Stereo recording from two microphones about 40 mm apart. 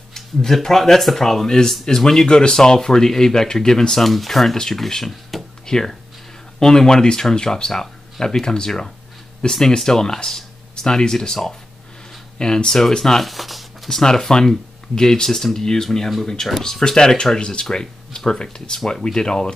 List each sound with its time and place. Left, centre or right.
0.1 s speech: centre
4.0 s speech: centre
13.2 s speech: centre
13.8 s speech: centre
16.8 s speech: centre